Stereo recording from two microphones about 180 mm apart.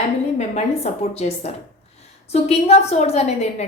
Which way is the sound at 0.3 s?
35° left (ahead or behind).